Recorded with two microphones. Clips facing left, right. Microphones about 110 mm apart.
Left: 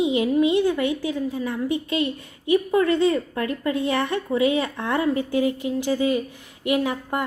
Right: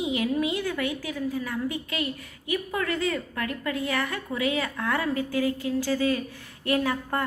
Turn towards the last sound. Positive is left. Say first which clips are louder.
# left 3 dB
turn(degrees=15)  # may be behind; listen again after turning